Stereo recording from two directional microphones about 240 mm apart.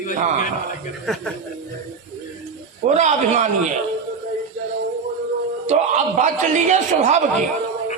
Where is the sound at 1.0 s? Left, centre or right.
Centre.